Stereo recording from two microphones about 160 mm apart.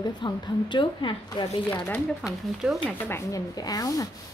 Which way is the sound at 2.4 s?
Centre (ahead or behind).